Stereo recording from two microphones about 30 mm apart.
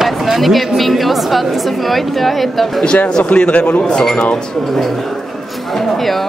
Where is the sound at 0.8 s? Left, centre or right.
Centre.